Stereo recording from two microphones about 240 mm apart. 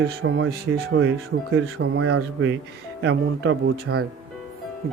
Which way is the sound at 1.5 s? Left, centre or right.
Right.